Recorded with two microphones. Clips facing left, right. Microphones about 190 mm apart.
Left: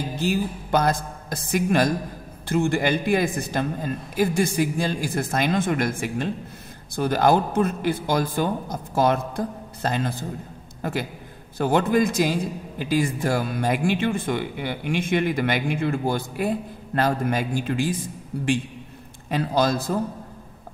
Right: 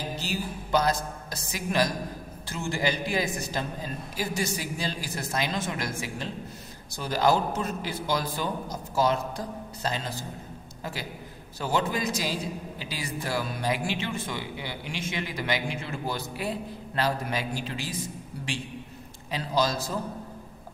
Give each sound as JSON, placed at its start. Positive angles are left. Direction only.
{"t": 0.2, "sound": "a man's voice", "side_deg": 50}
{"t": 19.3, "sound": "a man's voice", "side_deg": 55}